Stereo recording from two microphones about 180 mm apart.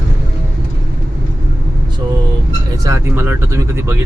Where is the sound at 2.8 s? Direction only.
15° right (ahead or behind).